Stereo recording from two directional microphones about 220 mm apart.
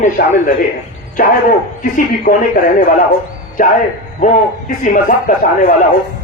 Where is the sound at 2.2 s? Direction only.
40° left (ahead or behind).